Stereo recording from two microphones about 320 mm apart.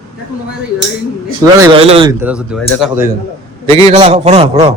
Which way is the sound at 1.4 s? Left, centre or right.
Centre.